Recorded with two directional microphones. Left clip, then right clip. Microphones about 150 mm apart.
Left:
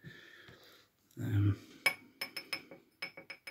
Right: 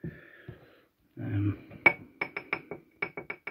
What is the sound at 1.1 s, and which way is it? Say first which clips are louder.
Speech: right 4 dB; 30° left (ahead or behind).